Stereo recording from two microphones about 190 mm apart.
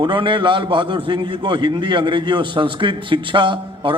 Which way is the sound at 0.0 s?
25° right (ahead or behind).